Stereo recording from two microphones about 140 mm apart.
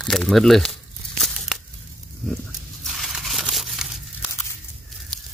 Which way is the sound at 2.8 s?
Centre (ahead or behind).